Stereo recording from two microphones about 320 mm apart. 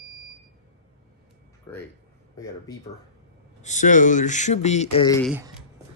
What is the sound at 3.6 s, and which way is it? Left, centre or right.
Speech, left.